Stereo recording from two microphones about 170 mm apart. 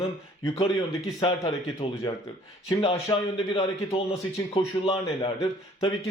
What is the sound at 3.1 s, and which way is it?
A man's voice, 25° left (ahead or behind).